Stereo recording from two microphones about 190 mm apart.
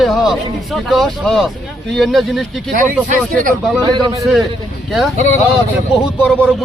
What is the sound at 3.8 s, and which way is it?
Speech, 25° right (ahead or behind).